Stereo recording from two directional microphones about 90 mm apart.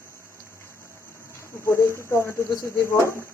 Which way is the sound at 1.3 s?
30° left (ahead or behind).